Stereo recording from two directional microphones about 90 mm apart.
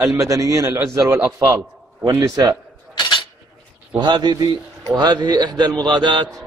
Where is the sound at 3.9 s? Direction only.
55° right (ahead or behind).